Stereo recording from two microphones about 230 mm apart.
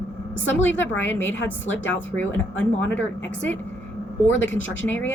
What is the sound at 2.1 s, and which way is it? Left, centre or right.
Speech, centre.